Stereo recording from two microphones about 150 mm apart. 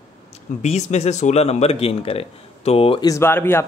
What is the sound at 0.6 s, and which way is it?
Speech, 50° left (ahead or behind).